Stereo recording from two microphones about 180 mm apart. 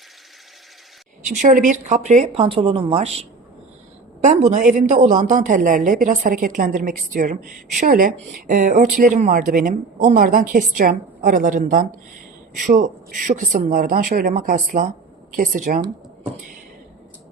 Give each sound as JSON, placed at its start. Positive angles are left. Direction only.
{"t": 1.4, "sound": "speech", "side_deg": -45}